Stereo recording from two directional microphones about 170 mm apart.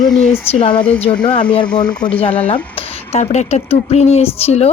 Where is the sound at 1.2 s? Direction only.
25° left (ahead or behind).